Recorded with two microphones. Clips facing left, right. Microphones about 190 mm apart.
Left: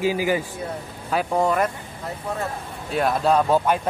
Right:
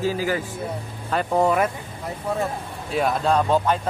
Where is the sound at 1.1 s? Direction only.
Centre (ahead or behind).